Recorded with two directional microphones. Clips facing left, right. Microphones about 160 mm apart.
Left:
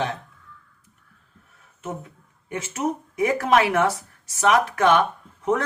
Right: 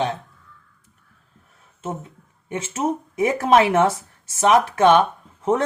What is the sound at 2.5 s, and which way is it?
Speech, 25° right (ahead or behind).